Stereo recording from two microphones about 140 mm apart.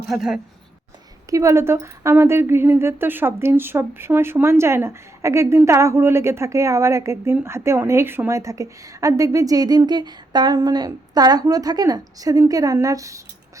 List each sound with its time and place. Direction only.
0.1 s a woman's voice: 5° right (ahead or behind)
1.3 s a woman's voice: 20° right (ahead or behind)